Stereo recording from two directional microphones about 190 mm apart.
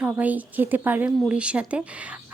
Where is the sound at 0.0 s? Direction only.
10° right (ahead or behind).